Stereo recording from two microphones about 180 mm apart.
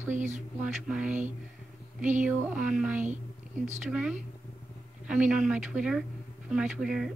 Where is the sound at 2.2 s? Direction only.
10° right (ahead or behind).